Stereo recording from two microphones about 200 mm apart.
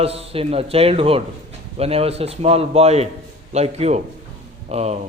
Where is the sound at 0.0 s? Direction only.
30° right (ahead or behind).